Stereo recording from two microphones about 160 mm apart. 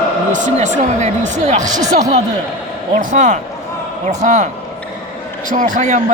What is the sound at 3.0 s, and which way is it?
A man's voice, 50° right (ahead or behind).